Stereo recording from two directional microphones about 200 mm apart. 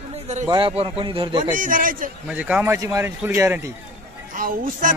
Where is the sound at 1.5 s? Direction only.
40° right (ahead or behind).